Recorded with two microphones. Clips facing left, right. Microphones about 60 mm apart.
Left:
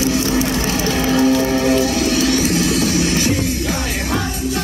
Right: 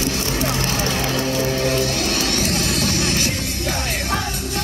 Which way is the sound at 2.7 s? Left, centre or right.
Right.